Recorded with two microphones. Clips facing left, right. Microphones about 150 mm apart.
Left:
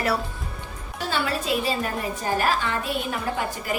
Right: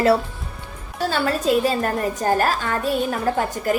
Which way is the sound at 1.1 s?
45° right (ahead or behind).